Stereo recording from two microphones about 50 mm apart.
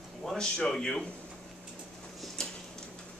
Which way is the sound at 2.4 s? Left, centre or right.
Centre.